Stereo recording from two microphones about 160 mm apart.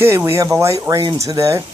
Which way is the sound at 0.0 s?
15° right (ahead or behind).